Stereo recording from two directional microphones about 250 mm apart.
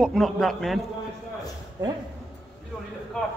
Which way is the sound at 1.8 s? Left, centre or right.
Centre.